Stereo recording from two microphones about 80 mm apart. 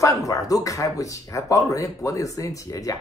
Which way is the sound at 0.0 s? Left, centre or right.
Left.